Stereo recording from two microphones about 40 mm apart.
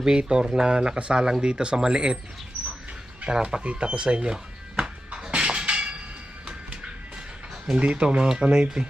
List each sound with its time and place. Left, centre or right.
0.0 s speech: right
3.2 s speech: centre
3.6 s speech: right
5.1 s a sound: right
7.8 s speech: right